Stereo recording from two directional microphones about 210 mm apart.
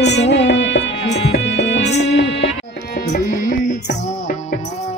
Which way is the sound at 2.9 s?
40° left (ahead or behind).